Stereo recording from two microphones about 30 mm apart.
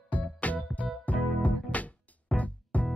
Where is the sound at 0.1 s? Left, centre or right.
Left.